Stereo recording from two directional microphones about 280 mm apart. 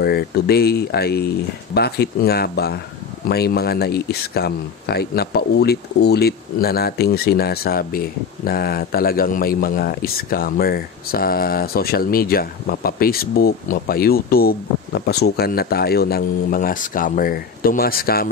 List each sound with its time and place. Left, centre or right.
0.0 s speech: left